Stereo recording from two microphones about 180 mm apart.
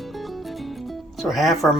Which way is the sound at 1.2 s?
Centre (ahead or behind).